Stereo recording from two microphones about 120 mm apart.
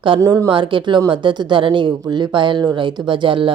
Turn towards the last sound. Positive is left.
turn(degrees=-45)  # may be behind; listen again after turning